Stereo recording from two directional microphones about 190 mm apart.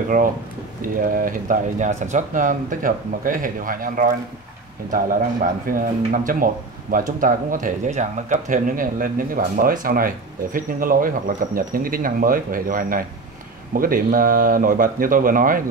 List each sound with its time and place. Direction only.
0.1 s speech: 45° right (ahead or behind)
5.7 s speech: 45° right (ahead or behind)